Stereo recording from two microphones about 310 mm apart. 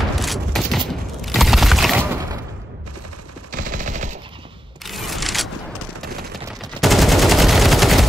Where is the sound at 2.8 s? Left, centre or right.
Right.